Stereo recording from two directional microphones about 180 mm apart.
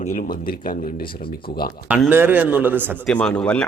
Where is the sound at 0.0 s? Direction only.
40° left (ahead or behind).